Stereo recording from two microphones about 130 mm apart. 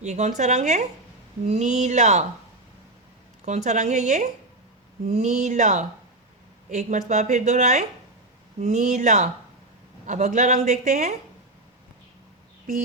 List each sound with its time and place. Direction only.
0.0 s a woman's voice: 60° right (ahead or behind)
3.4 s a woman's voice: 65° right (ahead or behind)